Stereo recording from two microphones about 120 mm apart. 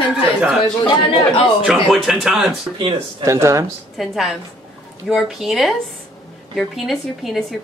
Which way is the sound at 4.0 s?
Centre (ahead or behind).